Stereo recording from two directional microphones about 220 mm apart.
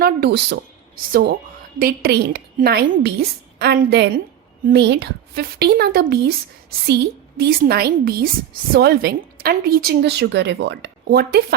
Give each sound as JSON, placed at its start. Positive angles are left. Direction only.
{"t": 0.0, "sound": "a woman's voice", "side_deg": -45}